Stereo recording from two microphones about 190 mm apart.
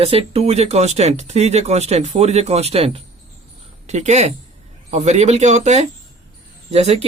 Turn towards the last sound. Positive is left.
turn(degrees=-35)  # may be behind; listen again after turning